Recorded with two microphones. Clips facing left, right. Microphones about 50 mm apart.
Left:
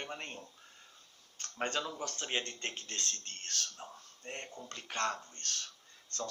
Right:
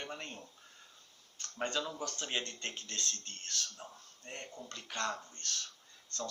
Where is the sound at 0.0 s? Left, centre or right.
Left.